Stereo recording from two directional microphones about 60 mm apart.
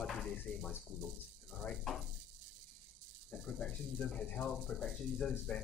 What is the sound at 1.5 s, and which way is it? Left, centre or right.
Speech, centre.